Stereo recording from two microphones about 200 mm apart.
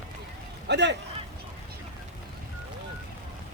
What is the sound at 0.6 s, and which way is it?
Speech, 60° right (ahead or behind).